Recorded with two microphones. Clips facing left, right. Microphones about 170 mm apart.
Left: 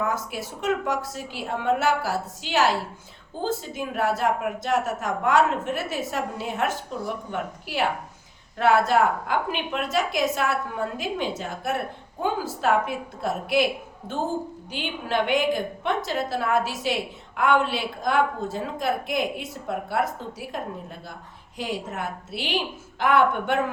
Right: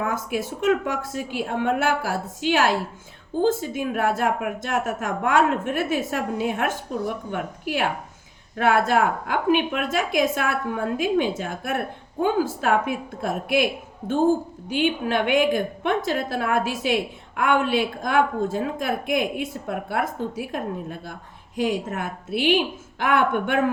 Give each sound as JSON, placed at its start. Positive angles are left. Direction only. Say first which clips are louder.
{"t": 0.0, "sound": "a woman's voice", "louder": "right 2 dB", "side_deg": -50}
{"t": 3.8, "sound": "a woman's voice", "louder": "right 2 dB", "side_deg": -50}
{"t": 14.7, "sound": "a woman's voice", "louder": "right 7 dB", "side_deg": -55}